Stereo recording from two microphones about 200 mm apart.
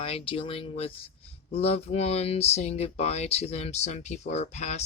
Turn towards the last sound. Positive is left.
turn(degrees=35)  # may be behind; listen again after turning